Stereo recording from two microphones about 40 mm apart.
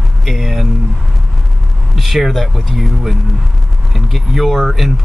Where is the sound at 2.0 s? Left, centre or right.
Centre.